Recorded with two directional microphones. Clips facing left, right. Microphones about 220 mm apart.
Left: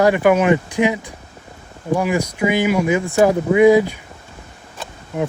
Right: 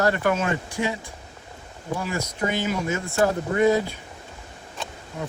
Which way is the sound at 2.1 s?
10° left (ahead or behind).